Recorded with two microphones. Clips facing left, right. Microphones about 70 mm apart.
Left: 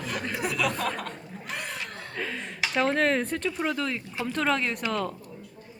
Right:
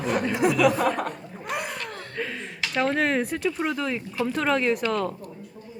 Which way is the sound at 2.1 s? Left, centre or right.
Centre.